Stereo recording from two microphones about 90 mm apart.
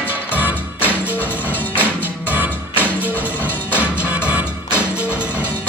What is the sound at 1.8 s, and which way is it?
Music, 20° right (ahead or behind).